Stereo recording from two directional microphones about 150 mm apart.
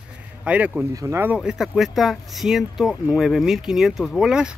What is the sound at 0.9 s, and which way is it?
Speech, 20° right (ahead or behind).